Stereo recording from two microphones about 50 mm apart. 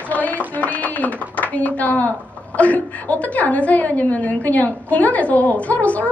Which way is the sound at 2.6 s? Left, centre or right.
Left.